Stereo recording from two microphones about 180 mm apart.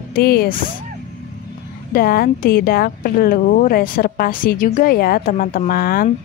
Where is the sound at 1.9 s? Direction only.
55° left (ahead or behind).